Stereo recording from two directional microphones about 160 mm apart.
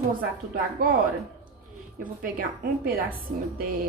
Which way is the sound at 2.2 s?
65° right (ahead or behind).